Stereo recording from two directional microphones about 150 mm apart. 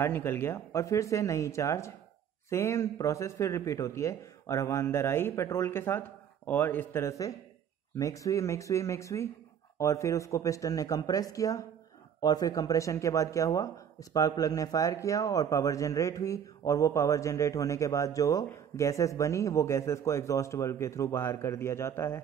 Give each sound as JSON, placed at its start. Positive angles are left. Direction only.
{"t": 0.0, "sound": "a man's voice", "side_deg": 15}